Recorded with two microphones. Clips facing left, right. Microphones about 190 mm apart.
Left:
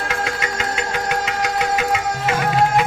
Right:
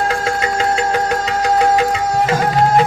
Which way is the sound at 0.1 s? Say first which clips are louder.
Right 6 dB; 35° right (ahead or behind).